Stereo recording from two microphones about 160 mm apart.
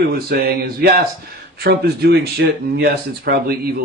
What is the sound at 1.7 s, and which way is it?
Speech, 85° right.